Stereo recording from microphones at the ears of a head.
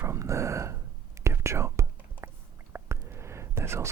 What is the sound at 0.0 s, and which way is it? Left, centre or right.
Whispering, right.